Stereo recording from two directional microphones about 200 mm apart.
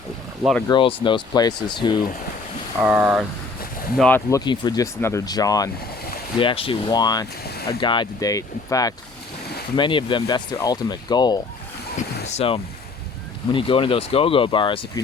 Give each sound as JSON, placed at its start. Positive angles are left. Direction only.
{"t": 0.7, "sound": "speech", "side_deg": 25}
{"t": 2.7, "sound": "speech", "side_deg": -10}
{"t": 3.9, "sound": "speech", "side_deg": 5}
{"t": 7.4, "sound": "boat", "side_deg": 50}
{"t": 7.7, "sound": "speech", "side_deg": 25}